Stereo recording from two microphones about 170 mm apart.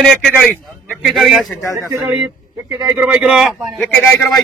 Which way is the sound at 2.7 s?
25° right (ahead or behind).